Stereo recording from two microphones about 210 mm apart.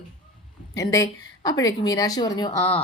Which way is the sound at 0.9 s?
15° left (ahead or behind).